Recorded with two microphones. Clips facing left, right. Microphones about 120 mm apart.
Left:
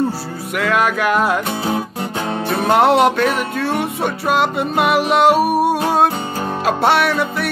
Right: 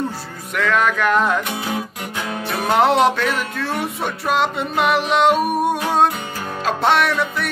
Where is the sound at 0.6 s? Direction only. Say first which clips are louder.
Left 1 dB; 10° left (ahead or behind).